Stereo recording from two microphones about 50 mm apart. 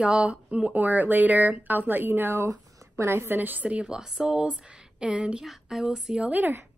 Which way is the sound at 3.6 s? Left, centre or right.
Right.